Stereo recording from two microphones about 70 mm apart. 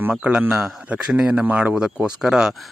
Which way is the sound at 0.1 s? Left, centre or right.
Centre.